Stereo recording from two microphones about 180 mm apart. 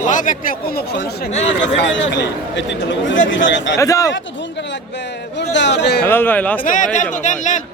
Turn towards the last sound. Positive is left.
turn(degrees=45)  # may be behind; listen again after turning